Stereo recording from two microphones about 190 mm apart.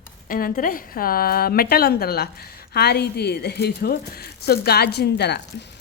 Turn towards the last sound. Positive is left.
turn(degrees=60)  # may be behind; listen again after turning